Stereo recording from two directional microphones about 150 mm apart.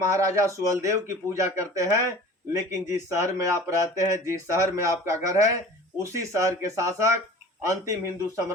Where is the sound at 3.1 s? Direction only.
20° right (ahead or behind).